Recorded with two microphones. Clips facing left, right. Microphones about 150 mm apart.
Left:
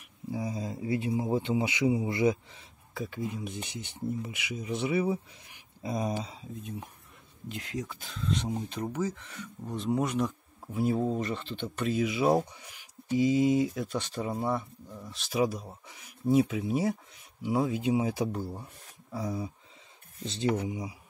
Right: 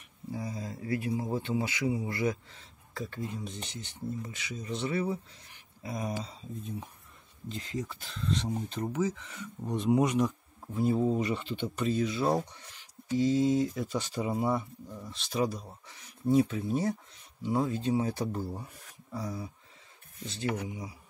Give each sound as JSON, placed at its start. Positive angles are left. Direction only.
{"t": 0.3, "sound": "a man's voice", "side_deg": 15}
{"t": 5.8, "sound": "a man's voice", "side_deg": 25}
{"t": 7.7, "sound": "speech", "side_deg": 0}
{"t": 13.7, "sound": "speech", "side_deg": 0}
{"t": 18.3, "sound": "speech", "side_deg": 0}
{"t": 19.1, "sound": "a man's voice", "side_deg": 15}